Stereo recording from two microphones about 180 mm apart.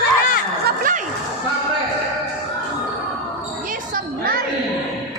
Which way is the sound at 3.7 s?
50° right (ahead or behind).